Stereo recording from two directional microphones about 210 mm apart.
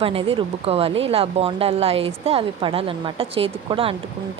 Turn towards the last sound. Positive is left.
turn(degrees=-25)  # may be behind; listen again after turning